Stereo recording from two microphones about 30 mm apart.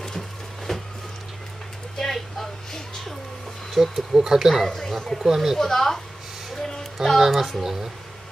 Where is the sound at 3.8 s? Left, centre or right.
Centre.